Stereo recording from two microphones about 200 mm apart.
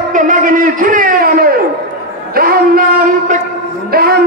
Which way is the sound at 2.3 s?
45° right (ahead or behind).